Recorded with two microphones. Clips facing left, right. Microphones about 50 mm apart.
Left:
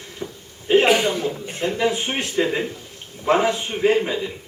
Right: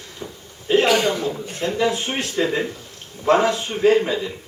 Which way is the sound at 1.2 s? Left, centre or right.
Left.